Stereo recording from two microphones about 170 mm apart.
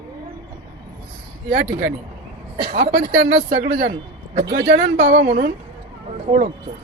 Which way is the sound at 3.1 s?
90° right.